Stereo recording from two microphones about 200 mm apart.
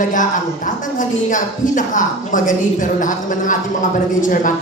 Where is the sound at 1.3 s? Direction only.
40° left (ahead or behind).